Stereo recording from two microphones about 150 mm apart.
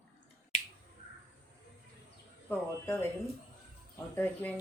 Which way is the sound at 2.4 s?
15° left (ahead or behind).